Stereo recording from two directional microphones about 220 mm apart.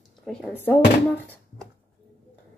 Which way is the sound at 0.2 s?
5° left (ahead or behind).